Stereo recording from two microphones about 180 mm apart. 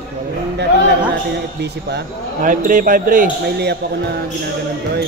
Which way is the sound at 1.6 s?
70° right (ahead or behind).